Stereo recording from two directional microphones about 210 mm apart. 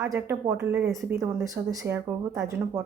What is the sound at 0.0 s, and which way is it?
Speech, 15° right (ahead or behind).